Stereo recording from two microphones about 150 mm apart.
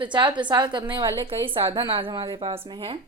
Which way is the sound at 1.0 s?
20° right (ahead or behind).